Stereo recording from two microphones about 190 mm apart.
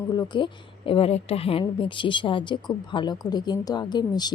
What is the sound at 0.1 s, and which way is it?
Speech, 25° left (ahead or behind).